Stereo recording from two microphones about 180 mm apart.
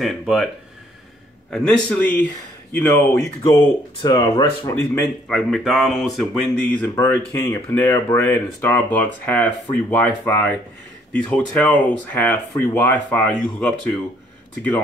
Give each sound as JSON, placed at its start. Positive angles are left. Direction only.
{"t": 0.0, "sound": "speech", "side_deg": 0}
{"t": 1.5, "sound": "speech", "side_deg": 5}
{"t": 5.3, "sound": "speech", "side_deg": 0}